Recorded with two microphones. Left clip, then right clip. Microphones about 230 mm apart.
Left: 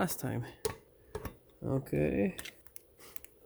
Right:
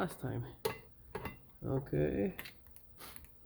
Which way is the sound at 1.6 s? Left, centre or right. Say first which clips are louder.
Left 3 dB; left.